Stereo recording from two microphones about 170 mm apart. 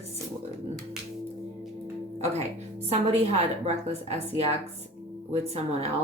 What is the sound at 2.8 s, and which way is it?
Speech, 35° right (ahead or behind).